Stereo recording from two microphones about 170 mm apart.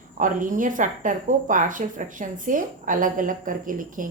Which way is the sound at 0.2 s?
50° right (ahead or behind).